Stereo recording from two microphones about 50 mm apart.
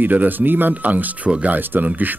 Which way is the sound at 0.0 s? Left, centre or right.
Right.